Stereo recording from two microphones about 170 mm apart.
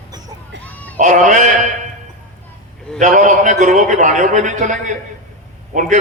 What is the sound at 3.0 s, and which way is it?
A man's voice, 50° right (ahead or behind).